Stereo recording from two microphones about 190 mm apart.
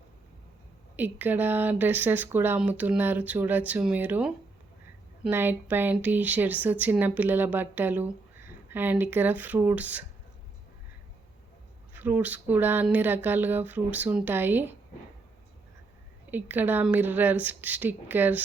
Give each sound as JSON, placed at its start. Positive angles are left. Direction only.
{"t": 0.9, "sound": "speech", "side_deg": -10}
{"t": 11.9, "sound": "speech", "side_deg": -10}
{"t": 16.3, "sound": "speech", "side_deg": -10}